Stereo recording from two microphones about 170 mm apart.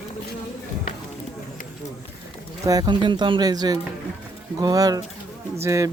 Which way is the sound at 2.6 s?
20° right (ahead or behind).